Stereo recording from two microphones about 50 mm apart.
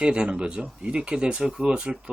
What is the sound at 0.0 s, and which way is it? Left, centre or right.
Speech, centre.